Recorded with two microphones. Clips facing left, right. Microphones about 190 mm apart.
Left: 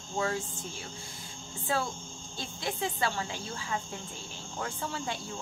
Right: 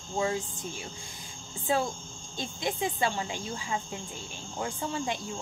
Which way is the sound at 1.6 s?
20° right (ahead or behind).